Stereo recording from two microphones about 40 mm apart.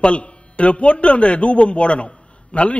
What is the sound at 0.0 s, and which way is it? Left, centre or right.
Speech, left.